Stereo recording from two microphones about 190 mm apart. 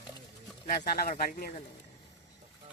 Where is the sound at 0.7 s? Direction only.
55° left (ahead or behind).